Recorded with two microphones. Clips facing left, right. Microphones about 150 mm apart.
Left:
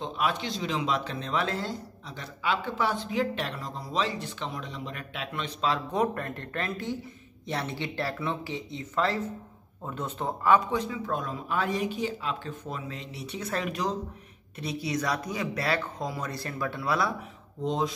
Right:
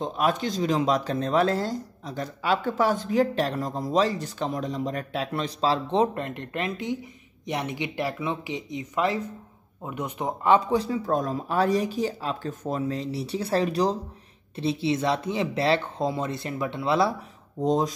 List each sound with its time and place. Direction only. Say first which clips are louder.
0.0 s speech: right 5 dB; 45° right (ahead or behind); by 17.1 s 25° right (ahead or behind)
17.6 s speech: right 5 dB; 40° right (ahead or behind)